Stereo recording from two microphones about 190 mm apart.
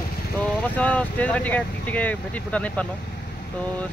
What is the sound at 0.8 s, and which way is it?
Speech, 5° left (ahead or behind).